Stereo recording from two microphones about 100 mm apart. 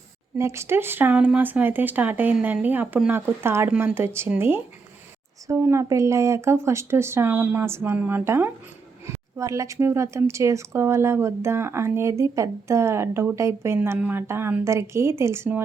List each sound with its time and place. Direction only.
0.3 s a woman's voice: 30° right (ahead or behind)